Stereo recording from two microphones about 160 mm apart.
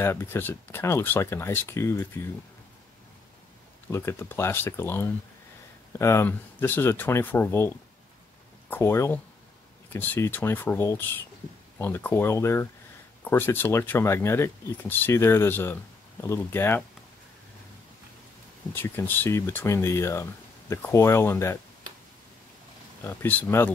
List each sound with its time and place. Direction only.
0.0 s speech: 15° left (ahead or behind)
3.9 s speech: 15° left (ahead or behind)
18.7 s speech: 15° left (ahead or behind)
23.0 s speech: 10° left (ahead or behind)